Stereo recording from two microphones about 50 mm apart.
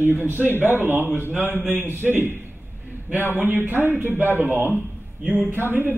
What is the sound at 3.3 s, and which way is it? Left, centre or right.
A man's voice, right.